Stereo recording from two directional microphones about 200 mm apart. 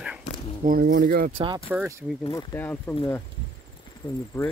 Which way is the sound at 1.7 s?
10° right (ahead or behind).